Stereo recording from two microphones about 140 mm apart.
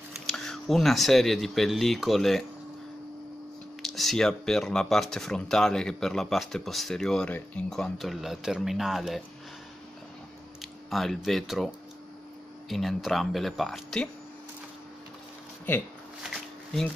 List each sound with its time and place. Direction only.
0.1 s speech: 5° left (ahead or behind)
3.8 s speech: centre (ahead or behind)
10.9 s speech: centre (ahead or behind)